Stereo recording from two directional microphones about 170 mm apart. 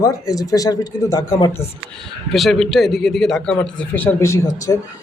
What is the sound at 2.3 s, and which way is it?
A man's voice, centre (ahead or behind).